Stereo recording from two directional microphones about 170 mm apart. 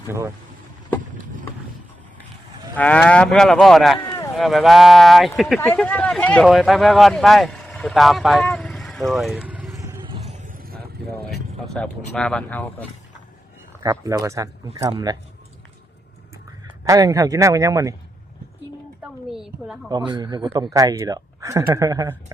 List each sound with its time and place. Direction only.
2.7 s speech: 10° left (ahead or behind); by 10.0 s 15° right (ahead or behind)
10.0 s vehicle: 30° right (ahead or behind)
10.4 s vehicle: 55° right (ahead or behind)
11.6 s speech: 5° left (ahead or behind)
13.8 s a man's voice: 20° right (ahead or behind)
16.8 s a man's voice: 20° right (ahead or behind)
19.3 s speech: 5° right (ahead or behind)
19.9 s a man's voice: 25° right (ahead or behind)